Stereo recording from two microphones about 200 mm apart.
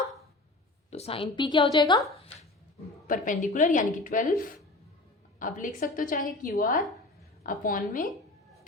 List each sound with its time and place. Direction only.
0.9 s a woman's voice: 30° left (ahead or behind)
3.1 s a woman's voice: 40° left (ahead or behind)